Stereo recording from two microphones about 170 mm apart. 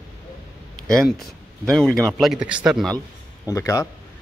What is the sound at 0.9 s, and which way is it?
Speech, centre (ahead or behind).